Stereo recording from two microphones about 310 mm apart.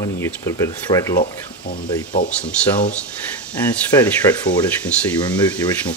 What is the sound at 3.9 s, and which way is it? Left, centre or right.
Speech, centre.